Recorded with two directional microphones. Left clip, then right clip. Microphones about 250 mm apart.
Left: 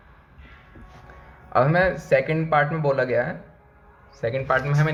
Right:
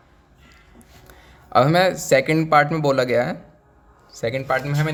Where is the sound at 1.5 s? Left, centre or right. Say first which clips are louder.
Right 3 dB; right.